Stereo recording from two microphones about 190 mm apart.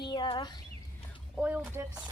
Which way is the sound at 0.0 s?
25° left (ahead or behind).